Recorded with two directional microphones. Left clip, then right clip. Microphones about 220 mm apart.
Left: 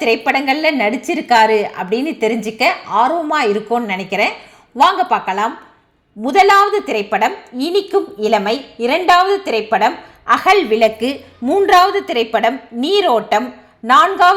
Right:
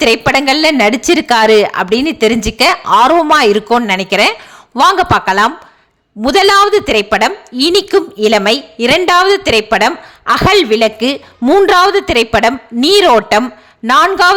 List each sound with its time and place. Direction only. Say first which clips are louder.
0.3 s a woman's voice: right 5 dB; 35° right (ahead or behind)